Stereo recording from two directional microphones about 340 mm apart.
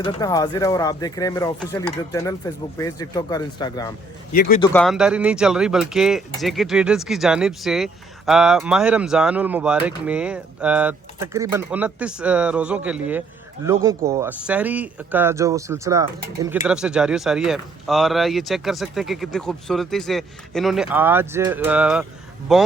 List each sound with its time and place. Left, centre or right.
0.0 s speech: centre
4.3 s a man's voice: left
4.6 s speech: centre